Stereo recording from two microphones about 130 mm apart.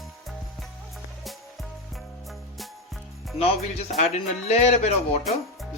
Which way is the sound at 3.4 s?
55° left (ahead or behind).